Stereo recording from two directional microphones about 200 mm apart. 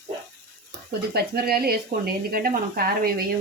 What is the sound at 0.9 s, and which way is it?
Speech, 50° right (ahead or behind).